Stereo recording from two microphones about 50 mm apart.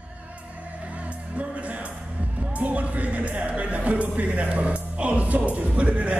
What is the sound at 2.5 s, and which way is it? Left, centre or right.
Speech, right.